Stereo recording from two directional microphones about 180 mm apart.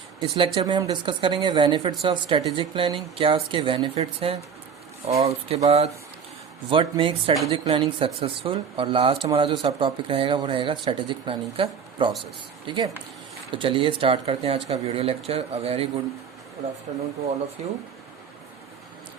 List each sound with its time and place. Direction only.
0.2 s speech: 30° right (ahead or behind)
17.6 s speech: 40° right (ahead or behind)